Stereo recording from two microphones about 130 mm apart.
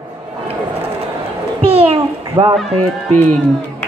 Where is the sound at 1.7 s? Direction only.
50° right (ahead or behind).